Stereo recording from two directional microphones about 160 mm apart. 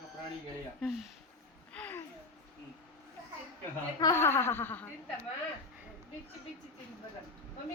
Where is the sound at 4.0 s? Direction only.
20° left (ahead or behind).